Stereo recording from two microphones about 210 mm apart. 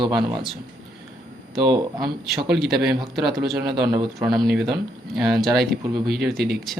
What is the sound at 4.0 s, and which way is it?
Speech, 20° right (ahead or behind).